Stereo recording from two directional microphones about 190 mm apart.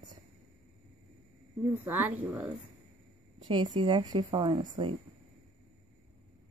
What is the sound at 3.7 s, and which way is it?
Speech, 25° right (ahead or behind).